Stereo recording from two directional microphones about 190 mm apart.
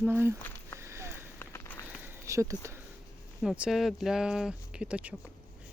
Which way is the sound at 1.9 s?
10° right (ahead or behind).